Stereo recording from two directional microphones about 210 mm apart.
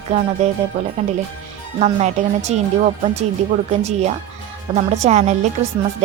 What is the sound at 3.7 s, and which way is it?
Speech, 30° right (ahead or behind).